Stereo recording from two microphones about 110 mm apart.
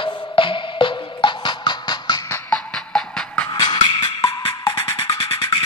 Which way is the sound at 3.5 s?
45° left (ahead or behind).